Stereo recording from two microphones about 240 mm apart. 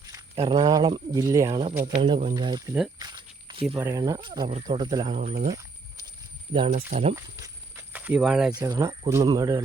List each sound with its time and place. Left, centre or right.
0.1 s speech: centre
3.0 s a sound: centre
3.8 s speech: centre
5.2 s speech: right
6.5 s speech: right
7.2 s speech: centre
8.5 s speech: centre